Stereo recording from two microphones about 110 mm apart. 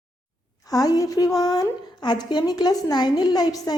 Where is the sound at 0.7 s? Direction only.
35° left (ahead or behind).